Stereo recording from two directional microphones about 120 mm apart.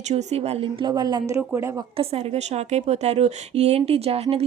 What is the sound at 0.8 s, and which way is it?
Speech, 35° right (ahead or behind).